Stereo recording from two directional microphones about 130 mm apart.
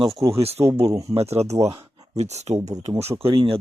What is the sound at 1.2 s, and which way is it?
Speech, 55° right (ahead or behind).